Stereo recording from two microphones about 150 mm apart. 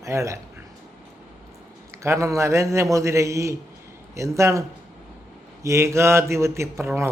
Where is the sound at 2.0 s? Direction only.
20° right (ahead or behind).